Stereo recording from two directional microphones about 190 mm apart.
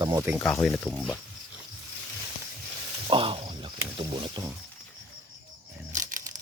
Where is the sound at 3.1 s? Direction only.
30° right (ahead or behind).